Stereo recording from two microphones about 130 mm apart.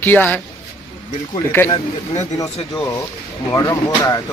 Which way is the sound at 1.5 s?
20° left (ahead or behind).